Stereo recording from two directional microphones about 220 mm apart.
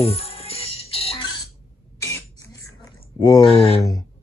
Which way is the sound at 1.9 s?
10° left (ahead or behind).